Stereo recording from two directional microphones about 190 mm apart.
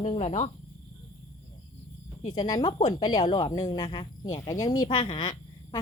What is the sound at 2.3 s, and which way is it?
Speech, 20° left (ahead or behind).